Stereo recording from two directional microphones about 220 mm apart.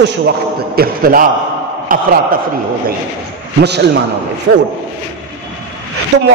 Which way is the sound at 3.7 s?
50° right (ahead or behind).